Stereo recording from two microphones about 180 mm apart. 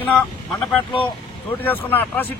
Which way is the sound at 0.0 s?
5° left (ahead or behind).